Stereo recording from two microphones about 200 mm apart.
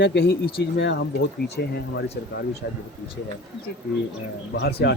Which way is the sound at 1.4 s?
55° left (ahead or behind).